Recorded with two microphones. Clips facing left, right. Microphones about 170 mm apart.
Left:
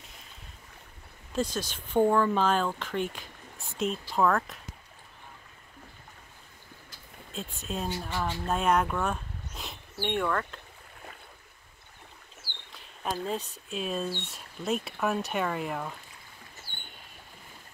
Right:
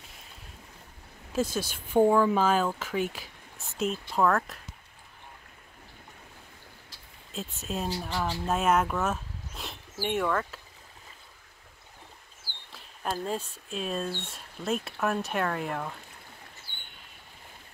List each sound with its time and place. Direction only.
1.3 s speech: 10° right (ahead or behind)
7.3 s speech: centre (ahead or behind)
12.5 s a sound: 50° right (ahead or behind)
13.2 s speech: centre (ahead or behind)